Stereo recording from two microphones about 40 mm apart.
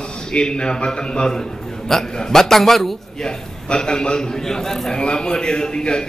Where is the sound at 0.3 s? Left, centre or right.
Left; by 3.0 s centre.